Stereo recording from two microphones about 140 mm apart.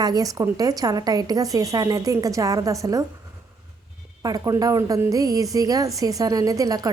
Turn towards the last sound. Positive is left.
turn(degrees=-25)  # may be behind; listen again after turning